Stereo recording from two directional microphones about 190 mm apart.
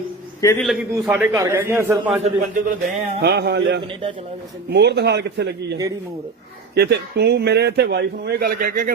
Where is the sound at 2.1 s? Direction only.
35° right (ahead or behind).